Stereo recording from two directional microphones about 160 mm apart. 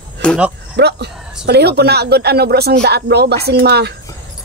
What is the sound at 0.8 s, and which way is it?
A woman's voice, 90° right.